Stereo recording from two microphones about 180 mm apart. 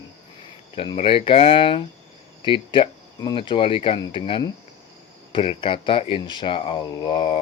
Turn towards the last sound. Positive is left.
turn(degrees=25)  # may be behind; listen again after turning